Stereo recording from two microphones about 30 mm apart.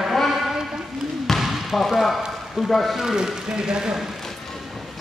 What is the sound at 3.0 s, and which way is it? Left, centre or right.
Speech, right.